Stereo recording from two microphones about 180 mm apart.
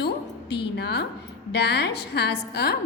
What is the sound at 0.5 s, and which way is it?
A woman's voice, 65° left (ahead or behind).